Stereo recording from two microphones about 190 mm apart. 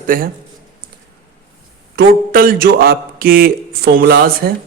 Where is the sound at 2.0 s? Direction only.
50° right (ahead or behind).